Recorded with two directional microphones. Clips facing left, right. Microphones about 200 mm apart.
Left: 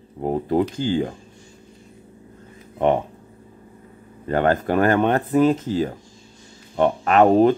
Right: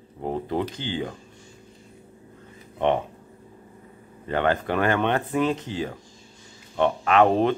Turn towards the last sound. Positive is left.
turn(degrees=40)  # may be behind; listen again after turning